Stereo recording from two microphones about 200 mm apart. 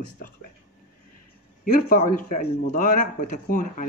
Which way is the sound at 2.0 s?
35° left (ahead or behind).